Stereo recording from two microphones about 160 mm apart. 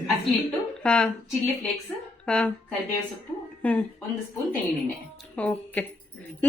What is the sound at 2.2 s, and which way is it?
Speech, 5° left (ahead or behind).